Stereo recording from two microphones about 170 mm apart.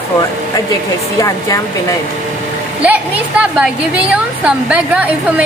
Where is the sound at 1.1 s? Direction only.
20° left (ahead or behind).